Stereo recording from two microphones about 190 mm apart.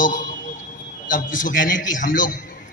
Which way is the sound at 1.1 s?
45° left (ahead or behind).